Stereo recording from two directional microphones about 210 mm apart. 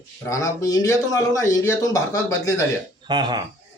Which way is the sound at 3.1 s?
20° right (ahead or behind).